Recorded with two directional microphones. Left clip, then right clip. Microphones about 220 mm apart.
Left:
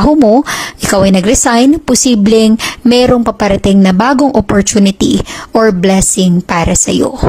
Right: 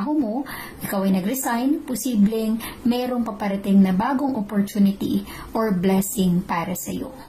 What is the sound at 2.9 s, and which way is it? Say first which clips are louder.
A woman's voice: left 16 dB; 40° left (ahead or behind).